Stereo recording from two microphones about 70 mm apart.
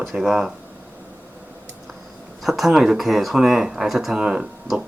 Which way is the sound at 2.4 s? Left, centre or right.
Centre.